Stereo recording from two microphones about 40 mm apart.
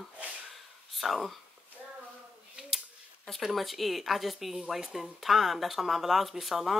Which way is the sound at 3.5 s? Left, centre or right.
Centre.